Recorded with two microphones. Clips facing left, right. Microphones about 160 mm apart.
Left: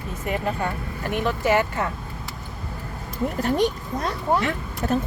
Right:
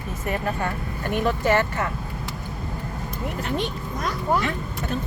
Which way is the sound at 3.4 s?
40° left (ahead or behind).